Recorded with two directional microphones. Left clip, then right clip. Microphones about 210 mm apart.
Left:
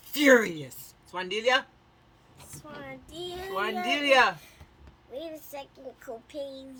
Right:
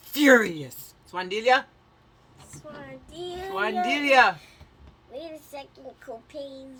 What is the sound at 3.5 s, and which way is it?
Speech, 30° right (ahead or behind).